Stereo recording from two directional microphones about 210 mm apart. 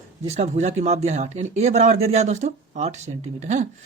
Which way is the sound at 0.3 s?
30° right (ahead or behind).